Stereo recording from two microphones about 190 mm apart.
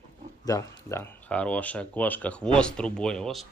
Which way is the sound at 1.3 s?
5° left (ahead or behind).